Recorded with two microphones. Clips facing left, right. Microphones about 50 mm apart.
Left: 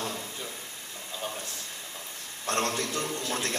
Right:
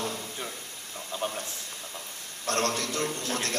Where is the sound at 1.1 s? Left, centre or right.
Right.